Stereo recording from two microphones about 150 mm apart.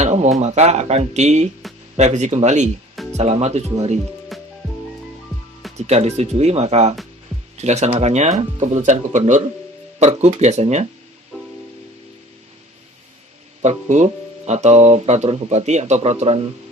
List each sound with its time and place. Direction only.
0.0 s speech: 50° right (ahead or behind)
4.3 s music: centre (ahead or behind)
5.7 s speech: 45° right (ahead or behind)
13.6 s speech: 50° right (ahead or behind)